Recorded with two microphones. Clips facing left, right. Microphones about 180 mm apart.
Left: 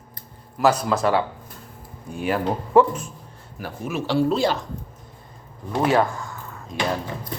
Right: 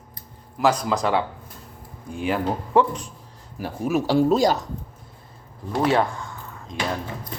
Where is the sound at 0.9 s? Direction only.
20° right (ahead or behind).